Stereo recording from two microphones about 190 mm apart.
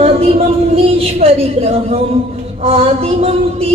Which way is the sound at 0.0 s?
30° right (ahead or behind).